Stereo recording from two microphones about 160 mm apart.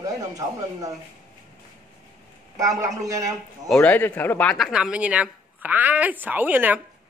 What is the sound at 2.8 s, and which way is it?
Speech, 20° right (ahead or behind).